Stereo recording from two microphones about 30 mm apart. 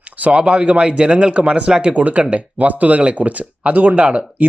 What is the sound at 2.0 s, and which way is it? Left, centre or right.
Speech, right.